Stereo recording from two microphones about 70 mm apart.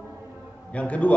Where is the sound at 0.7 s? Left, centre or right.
Centre.